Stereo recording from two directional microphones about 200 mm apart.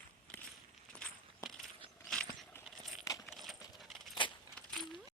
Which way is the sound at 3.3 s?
Centre (ahead or behind).